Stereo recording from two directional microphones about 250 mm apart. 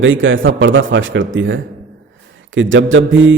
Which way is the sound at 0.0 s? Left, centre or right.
Right.